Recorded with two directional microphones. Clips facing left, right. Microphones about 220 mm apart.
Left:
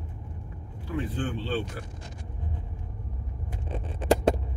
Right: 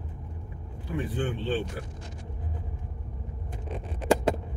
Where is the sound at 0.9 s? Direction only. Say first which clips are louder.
Even; 15° right (ahead or behind).